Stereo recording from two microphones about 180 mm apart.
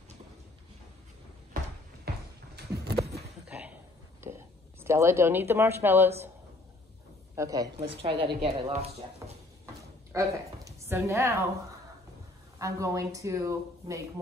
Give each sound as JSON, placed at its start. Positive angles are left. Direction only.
{"t": 2.5, "sound": "a sound", "side_deg": -60}
{"t": 3.4, "sound": "a sound", "side_deg": -10}
{"t": 4.2, "sound": "whispering", "side_deg": -15}
{"t": 4.8, "sound": "speech", "side_deg": -15}
{"t": 7.3, "sound": "a man's voice", "side_deg": -20}
{"t": 7.8, "sound": "speech", "side_deg": -30}
{"t": 9.2, "sound": "a sound", "side_deg": -15}
{"t": 10.1, "sound": "a woman's voice", "side_deg": -15}
{"t": 12.5, "sound": "speech", "side_deg": -20}